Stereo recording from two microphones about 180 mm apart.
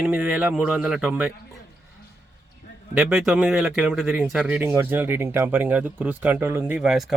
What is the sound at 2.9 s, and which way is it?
A man's voice, 10° right (ahead or behind).